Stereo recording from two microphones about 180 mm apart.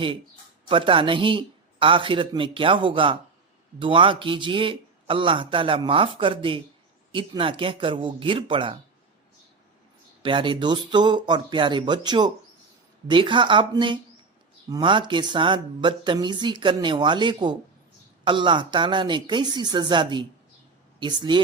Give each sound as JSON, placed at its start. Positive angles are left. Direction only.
{"t": 0.7, "sound": "speech", "side_deg": -30}
{"t": 10.2, "sound": "speech", "side_deg": -30}